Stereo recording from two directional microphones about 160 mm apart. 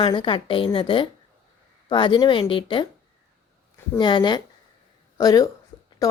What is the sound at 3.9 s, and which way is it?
A woman's voice, 30° left (ahead or behind).